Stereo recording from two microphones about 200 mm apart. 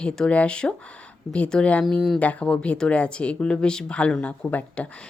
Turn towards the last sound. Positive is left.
turn(degrees=5)  # may be behind; listen again after turning